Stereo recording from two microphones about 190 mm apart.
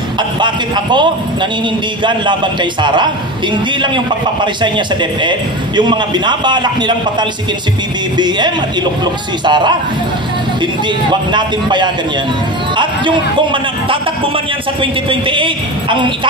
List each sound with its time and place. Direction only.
2.0 s a man's voice: 25° right (ahead or behind)
4.6 s a man's voice: 25° right (ahead or behind)
11.1 s a man's voice: 25° right (ahead or behind)